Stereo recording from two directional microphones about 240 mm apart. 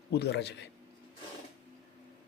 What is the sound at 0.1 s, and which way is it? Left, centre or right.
Speech, left.